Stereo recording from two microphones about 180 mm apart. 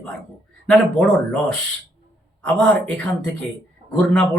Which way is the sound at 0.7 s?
5° left (ahead or behind).